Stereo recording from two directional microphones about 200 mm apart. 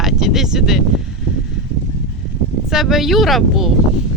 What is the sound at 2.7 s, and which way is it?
Speech, centre (ahead or behind).